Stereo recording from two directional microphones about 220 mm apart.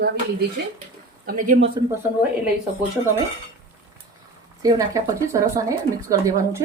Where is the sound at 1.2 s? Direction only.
35° right (ahead or behind).